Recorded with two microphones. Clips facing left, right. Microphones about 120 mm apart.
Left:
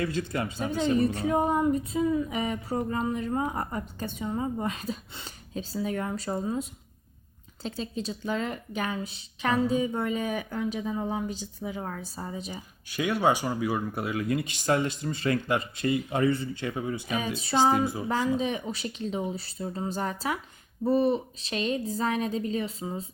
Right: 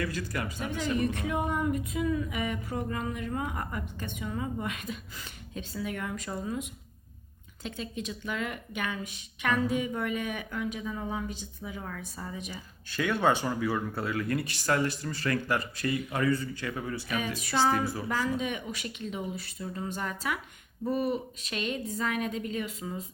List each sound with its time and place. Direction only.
0.0 s a woman's voice: 25° left (ahead or behind)
12.9 s a woman's voice: 15° left (ahead or behind); by 23.0 s 30° left (ahead or behind)